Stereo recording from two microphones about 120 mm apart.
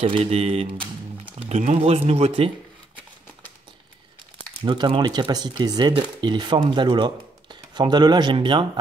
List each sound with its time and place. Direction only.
0.0 s speech: 55° right (ahead or behind)
1.5 s speech: 70° right (ahead or behind); by 2.5 s 55° right (ahead or behind)
4.6 s speech: 40° right (ahead or behind)